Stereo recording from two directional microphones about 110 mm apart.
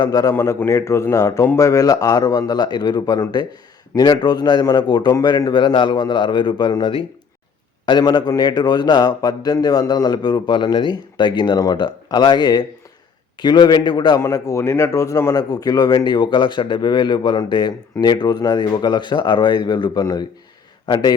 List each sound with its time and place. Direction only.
0.0 s a man's voice: 35° left (ahead or behind)
0.3 s a man's voice: 25° left (ahead or behind); by 14.2 s 40° left (ahead or behind)
14.2 s a man's voice: 30° left (ahead or behind)